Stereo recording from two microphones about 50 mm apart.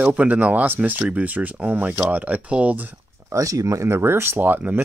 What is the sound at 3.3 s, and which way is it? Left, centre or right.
Speech, right.